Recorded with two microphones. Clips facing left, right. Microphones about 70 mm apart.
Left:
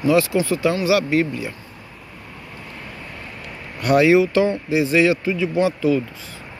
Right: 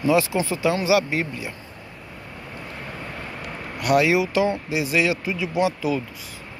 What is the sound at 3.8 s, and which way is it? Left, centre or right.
Speech, centre.